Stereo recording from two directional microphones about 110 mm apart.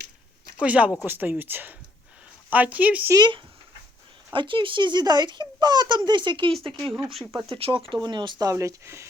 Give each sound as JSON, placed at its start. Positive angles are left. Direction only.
{"t": 0.6, "sound": "speech", "side_deg": -10}
{"t": 3.2, "sound": "a child's voice", "side_deg": -45}
{"t": 8.0, "sound": "a child's voice", "side_deg": -45}
{"t": 8.4, "sound": "speech", "side_deg": -25}